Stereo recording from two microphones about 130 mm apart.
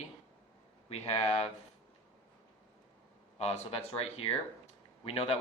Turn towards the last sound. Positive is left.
turn(degrees=50)  # may be behind; listen again after turning